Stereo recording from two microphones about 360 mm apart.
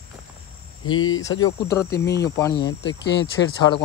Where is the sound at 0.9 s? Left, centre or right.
Left.